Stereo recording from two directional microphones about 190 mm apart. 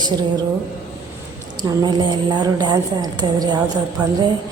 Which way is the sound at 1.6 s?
20° right (ahead or behind).